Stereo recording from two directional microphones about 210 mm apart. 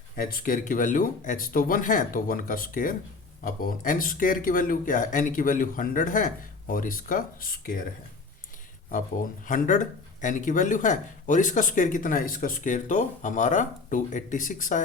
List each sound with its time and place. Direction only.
0.2 s speech: 45° left (ahead or behind)
9.5 s speech: 40° left (ahead or behind)